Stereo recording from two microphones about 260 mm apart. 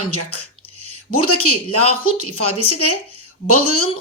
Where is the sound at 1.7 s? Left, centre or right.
Left.